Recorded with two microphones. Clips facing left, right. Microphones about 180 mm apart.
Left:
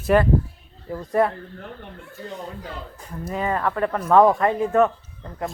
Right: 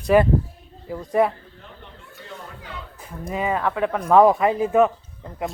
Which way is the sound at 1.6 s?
60° left (ahead or behind).